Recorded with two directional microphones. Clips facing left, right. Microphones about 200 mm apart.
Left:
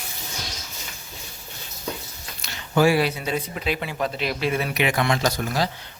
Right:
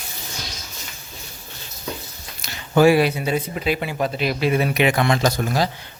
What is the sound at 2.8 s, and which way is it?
Speech, 60° right (ahead or behind).